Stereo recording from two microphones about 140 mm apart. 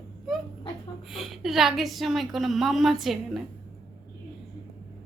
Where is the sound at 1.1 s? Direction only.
Centre (ahead or behind).